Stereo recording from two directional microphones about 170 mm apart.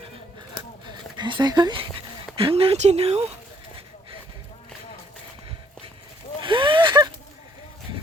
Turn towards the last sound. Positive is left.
turn(degrees=-25)  # may be behind; listen again after turning